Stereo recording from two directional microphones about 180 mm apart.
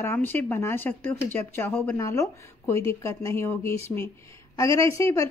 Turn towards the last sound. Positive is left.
turn(degrees=15)  # may be behind; listen again after turning